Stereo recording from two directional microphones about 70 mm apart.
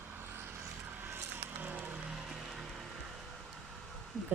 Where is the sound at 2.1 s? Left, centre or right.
Centre.